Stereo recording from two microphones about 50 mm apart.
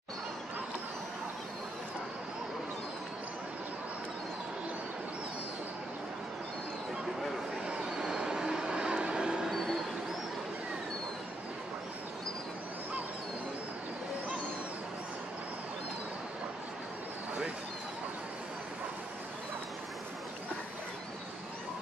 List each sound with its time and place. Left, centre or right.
7.6 s vehicle: centre
9.5 s dog: centre